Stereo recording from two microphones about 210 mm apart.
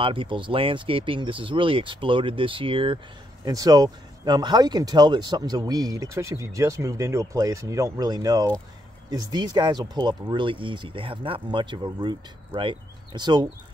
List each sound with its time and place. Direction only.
0.0 s speech: 25° right (ahead or behind)